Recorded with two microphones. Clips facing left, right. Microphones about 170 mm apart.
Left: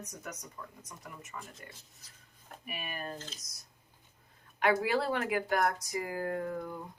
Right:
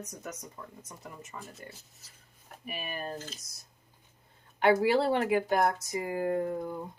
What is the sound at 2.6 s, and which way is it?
Speech, 30° right (ahead or behind).